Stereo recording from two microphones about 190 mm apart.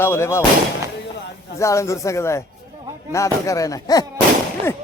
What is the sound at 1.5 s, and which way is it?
Speech, 15° left (ahead or behind).